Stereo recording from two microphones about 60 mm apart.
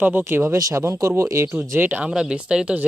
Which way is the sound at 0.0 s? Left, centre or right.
Right.